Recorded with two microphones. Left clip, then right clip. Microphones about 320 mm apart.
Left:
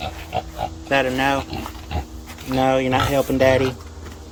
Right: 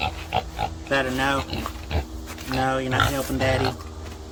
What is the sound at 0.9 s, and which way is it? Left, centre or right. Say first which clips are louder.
Speech: left 4 dB; centre.